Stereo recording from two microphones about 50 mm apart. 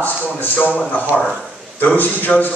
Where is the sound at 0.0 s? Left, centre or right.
Left.